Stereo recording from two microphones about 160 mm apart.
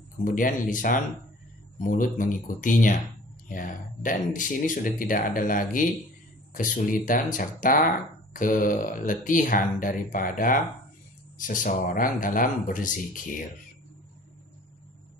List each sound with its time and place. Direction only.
0.2 s speech: 55° left (ahead or behind)